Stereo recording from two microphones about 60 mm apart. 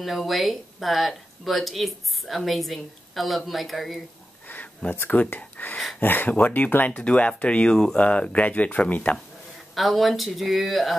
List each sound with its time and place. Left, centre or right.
0.0 s speech: centre
4.5 s speech: left
9.8 s speech: centre